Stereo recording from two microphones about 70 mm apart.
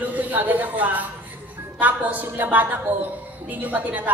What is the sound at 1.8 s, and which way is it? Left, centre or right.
Music, right.